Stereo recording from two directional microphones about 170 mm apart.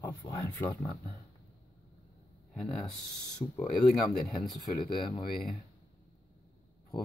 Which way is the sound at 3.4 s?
15° left (ahead or behind).